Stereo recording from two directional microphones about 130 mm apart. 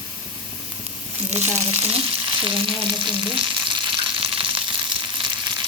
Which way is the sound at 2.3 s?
40° right (ahead or behind).